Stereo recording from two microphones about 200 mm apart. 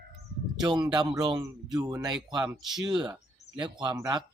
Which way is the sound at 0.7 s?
20° right (ahead or behind).